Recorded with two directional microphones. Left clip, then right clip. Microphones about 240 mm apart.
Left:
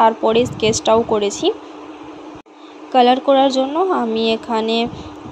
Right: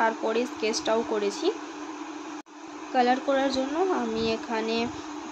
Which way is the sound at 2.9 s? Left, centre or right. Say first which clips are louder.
Left 11 dB; left.